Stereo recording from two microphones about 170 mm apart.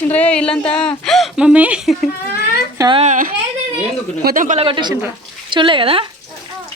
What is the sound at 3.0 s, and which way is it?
Speech, 50° right (ahead or behind).